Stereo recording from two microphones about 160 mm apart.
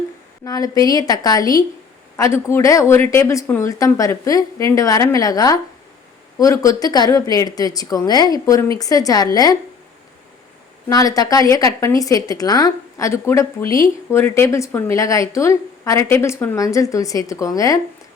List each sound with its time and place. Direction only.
0.4 s a woman's voice: 20° left (ahead or behind)
10.8 s a woman's voice: 20° left (ahead or behind)